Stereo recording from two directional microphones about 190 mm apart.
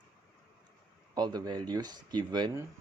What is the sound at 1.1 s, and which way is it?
Speech, 20° right (ahead or behind).